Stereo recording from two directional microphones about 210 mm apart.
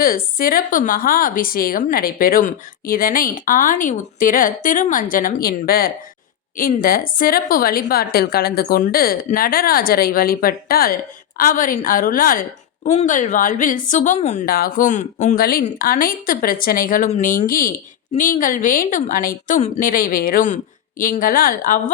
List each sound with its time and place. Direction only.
0.0 s a woman's voice: 45° left (ahead or behind)